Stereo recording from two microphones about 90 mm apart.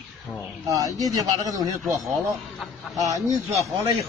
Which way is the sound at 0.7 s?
40° right (ahead or behind).